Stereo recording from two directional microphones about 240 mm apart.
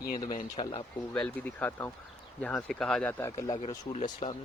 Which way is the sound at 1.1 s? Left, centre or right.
Centre.